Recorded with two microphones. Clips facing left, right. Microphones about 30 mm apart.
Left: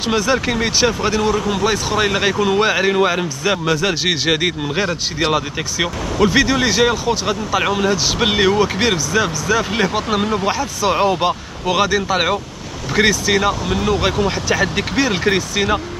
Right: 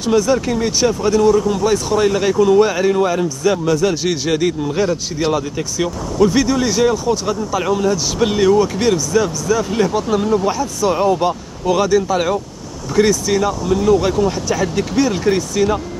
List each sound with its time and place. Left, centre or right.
0.0 s a man's voice: left
5.8 s speech: left
7.5 s a man's voice: left
12.9 s speech: left